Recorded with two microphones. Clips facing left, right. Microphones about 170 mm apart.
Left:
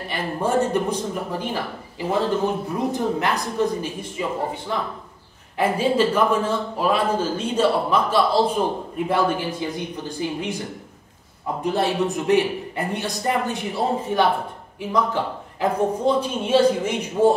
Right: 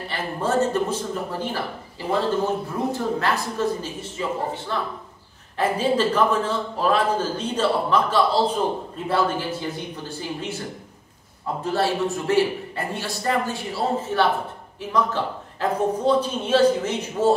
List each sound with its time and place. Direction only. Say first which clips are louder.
0.1 s a man's voice: left 2 dB; 15° left (ahead or behind)
11.6 s a man's voice: left 1 dB; 20° left (ahead or behind)